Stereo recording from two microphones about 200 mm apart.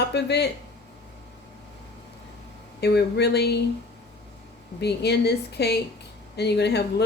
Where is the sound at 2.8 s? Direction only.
55° left (ahead or behind).